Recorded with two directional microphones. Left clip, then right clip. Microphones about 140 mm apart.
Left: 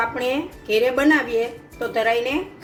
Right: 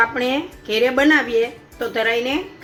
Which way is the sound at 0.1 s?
50° right (ahead or behind).